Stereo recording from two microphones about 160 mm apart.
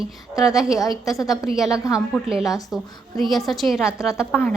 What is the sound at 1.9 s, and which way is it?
A woman's voice, 5° right (ahead or behind).